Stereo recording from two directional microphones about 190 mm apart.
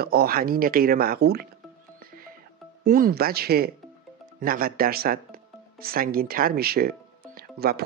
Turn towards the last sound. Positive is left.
turn(degrees=-55)  # may be behind; listen again after turning